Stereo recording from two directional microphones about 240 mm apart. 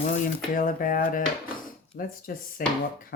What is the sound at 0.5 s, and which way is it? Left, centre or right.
Speech, left.